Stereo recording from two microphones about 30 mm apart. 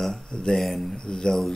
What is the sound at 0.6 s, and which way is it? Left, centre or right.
Speech, centre.